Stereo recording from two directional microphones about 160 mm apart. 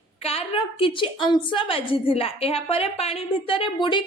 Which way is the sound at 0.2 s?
40° left (ahead or behind).